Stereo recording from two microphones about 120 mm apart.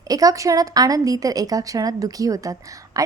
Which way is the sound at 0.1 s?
30° right (ahead or behind).